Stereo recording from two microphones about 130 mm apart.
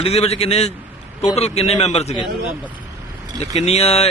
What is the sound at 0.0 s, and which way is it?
A man's voice, 55° left (ahead or behind).